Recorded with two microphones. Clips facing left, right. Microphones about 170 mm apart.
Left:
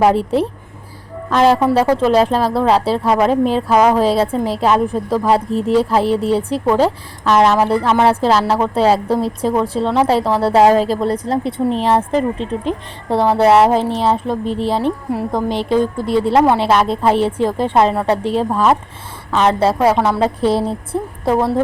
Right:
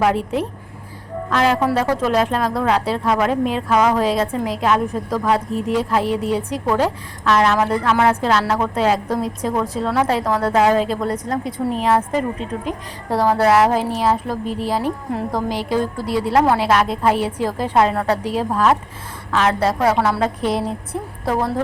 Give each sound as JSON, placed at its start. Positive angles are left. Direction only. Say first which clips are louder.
{"t": 0.0, "sound": "a woman's voice", "louder": "left 5 dB", "side_deg": 30}